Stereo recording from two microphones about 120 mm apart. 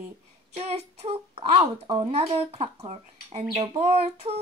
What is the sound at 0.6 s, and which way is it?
A child's voice, 55° right (ahead or behind).